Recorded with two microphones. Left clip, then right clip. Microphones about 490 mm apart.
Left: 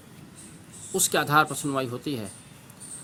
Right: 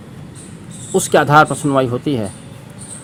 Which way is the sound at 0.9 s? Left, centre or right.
Left.